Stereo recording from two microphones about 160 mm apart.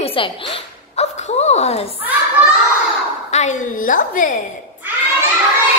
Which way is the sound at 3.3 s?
45° left (ahead or behind).